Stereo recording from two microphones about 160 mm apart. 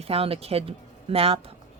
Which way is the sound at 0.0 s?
40° right (ahead or behind).